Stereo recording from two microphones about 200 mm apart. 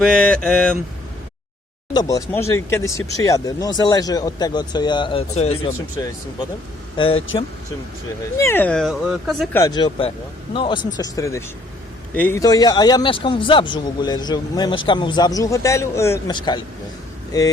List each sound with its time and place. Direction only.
0.0 s speech: 5° left (ahead or behind)
1.9 s a man's voice: 20° left (ahead or behind)
6.9 s speech: 25° left (ahead or behind)
8.4 s speech: 10° left (ahead or behind)
9.5 s a man's voice: 15° left (ahead or behind)